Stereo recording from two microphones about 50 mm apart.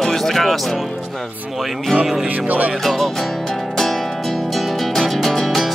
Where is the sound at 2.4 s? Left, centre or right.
Right.